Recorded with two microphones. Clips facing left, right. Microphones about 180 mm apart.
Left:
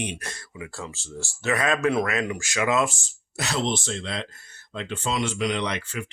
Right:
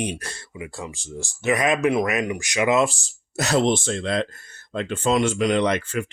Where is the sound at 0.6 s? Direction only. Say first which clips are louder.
Right 3 dB; 15° right (ahead or behind).